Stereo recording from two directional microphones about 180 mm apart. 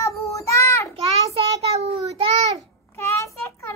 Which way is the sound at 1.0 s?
35° right (ahead or behind).